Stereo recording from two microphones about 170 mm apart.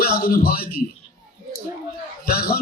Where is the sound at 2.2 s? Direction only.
65° left (ahead or behind).